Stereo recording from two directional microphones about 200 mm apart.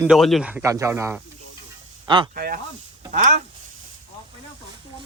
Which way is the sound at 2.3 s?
50° right (ahead or behind).